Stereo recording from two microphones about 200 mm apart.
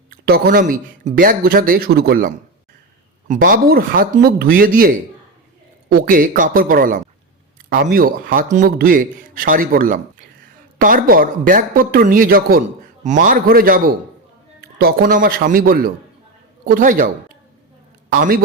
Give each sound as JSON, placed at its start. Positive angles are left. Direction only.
{"t": 0.1, "sound": "a man's voice", "side_deg": -50}
{"t": 18.1, "sound": "a man's voice", "side_deg": -45}